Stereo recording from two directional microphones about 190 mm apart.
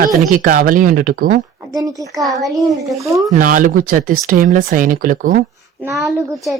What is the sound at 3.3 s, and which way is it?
Speech, 45° right (ahead or behind).